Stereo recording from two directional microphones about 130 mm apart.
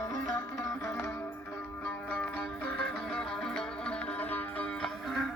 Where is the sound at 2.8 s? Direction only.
5° left (ahead or behind).